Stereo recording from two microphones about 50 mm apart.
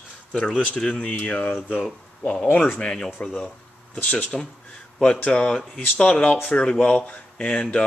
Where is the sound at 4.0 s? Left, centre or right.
Left.